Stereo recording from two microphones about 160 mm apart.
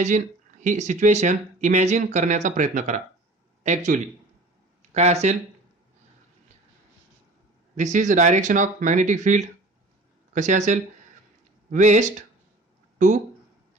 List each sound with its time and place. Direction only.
0.6 s speech: 50° right (ahead or behind)
7.8 s speech: 50° right (ahead or behind)